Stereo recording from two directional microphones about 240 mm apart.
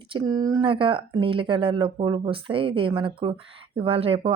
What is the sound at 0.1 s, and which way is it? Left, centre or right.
Speech, centre.